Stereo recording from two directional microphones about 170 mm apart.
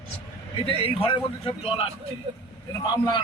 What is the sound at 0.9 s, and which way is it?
Speech, 30° left (ahead or behind).